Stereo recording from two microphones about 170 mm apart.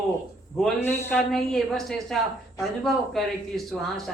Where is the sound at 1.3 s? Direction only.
Centre (ahead or behind).